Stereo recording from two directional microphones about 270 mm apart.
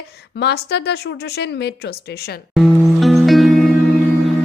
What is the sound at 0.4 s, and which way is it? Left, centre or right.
Speech, left.